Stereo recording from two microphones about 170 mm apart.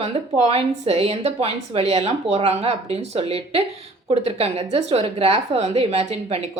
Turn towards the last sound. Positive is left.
turn(degrees=-40)  # may be behind; listen again after turning